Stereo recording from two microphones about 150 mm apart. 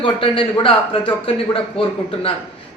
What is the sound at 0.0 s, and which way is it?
A man's voice, 35° left (ahead or behind).